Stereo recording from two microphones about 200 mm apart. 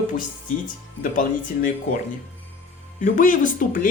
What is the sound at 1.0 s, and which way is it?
Speech, 45° left (ahead or behind).